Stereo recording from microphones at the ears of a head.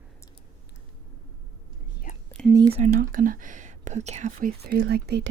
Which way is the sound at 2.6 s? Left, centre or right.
Right.